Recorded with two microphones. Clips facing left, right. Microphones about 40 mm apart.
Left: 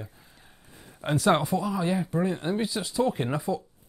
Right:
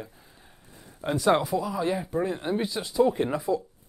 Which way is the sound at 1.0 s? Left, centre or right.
Left.